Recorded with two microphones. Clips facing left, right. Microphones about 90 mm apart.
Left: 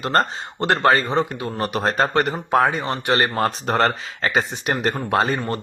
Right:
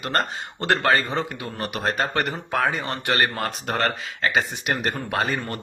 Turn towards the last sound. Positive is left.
turn(degrees=30)  # may be behind; listen again after turning